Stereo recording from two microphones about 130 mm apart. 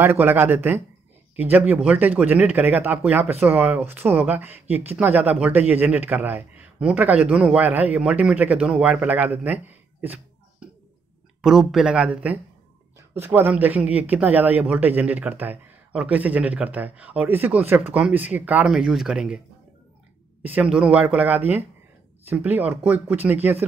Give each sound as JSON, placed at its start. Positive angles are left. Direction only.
{"t": 0.0, "sound": "speech", "side_deg": -15}
{"t": 11.4, "sound": "speech", "side_deg": -5}
{"t": 20.4, "sound": "speech", "side_deg": -10}